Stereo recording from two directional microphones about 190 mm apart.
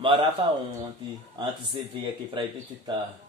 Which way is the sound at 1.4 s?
20° right (ahead or behind).